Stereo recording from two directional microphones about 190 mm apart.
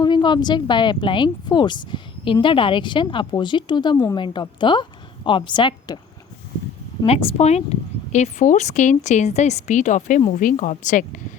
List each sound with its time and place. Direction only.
0.0 s speech: 25° left (ahead or behind)
7.0 s a woman's voice: 30° left (ahead or behind)